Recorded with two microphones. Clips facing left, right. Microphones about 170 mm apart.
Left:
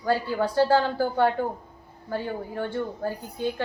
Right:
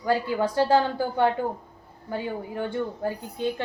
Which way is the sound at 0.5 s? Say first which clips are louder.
Left 1 dB; 20° right (ahead or behind).